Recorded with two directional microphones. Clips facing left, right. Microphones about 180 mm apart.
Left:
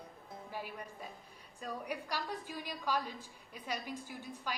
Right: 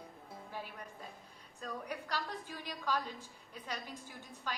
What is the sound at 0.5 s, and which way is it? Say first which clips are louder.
A woman's voice: left 3 dB; 10° left (ahead or behind).